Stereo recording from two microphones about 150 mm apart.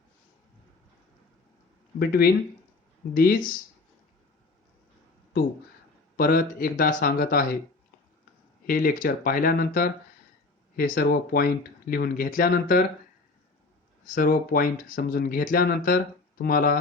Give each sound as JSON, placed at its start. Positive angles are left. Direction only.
{"t": 2.0, "sound": "speech", "side_deg": 90}
{"t": 3.2, "sound": "speech", "side_deg": 70}
{"t": 6.1, "sound": "speech", "side_deg": 80}
{"t": 8.6, "sound": "speech", "side_deg": 70}
{"t": 14.0, "sound": "speech", "side_deg": 70}